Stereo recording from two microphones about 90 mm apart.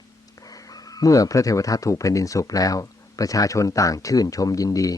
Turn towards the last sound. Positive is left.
turn(degrees=40)  # may be behind; listen again after turning